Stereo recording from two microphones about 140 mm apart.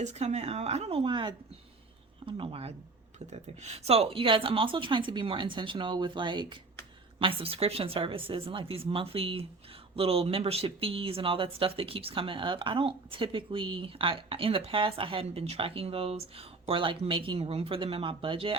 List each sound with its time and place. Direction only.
0.0 s speech: 55° right (ahead or behind); by 18.5 s 40° right (ahead or behind)